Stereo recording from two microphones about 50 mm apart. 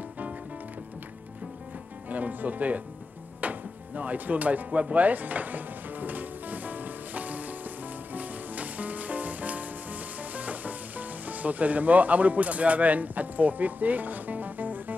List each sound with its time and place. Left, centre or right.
2.0 s speech: right
3.3 s music: right